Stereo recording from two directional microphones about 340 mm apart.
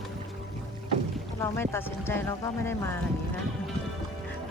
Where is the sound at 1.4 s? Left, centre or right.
Centre.